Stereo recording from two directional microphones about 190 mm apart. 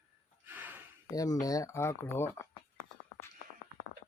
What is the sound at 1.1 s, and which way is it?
Speech, 20° left (ahead or behind).